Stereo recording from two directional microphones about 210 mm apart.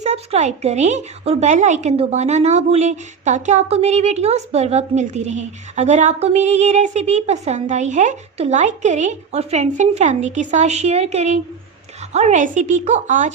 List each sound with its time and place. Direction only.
0.0 s speech: 30° right (ahead or behind)